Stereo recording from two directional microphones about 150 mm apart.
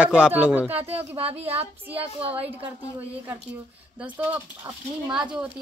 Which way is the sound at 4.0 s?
10° right (ahead or behind).